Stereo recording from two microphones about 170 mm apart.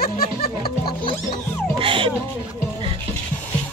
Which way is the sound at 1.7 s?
30° right (ahead or behind).